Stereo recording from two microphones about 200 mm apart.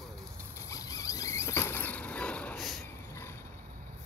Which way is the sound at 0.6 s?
15° left (ahead or behind).